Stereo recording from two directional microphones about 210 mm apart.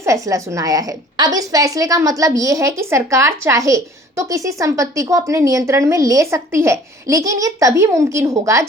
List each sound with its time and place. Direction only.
0.0 s a woman's voice: 15° right (ahead or behind)